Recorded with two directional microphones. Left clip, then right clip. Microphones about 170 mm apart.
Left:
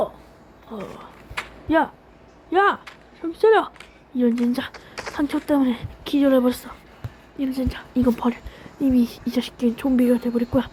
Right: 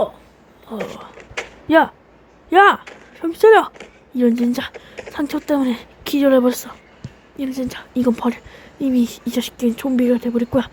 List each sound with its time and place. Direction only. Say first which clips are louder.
0.7 s a woman's voice: right 7 dB; 20° right (ahead or behind)